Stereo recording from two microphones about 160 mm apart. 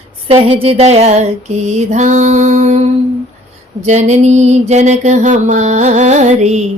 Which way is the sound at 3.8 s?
45° right (ahead or behind).